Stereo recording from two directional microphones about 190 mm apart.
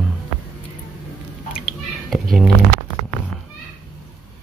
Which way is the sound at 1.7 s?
Centre (ahead or behind).